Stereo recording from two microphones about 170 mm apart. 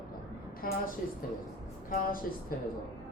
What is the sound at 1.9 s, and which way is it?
Speech, 55° left (ahead or behind).